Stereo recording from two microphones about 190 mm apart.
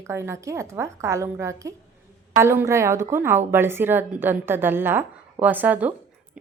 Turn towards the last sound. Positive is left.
turn(degrees=-10)  # may be behind; listen again after turning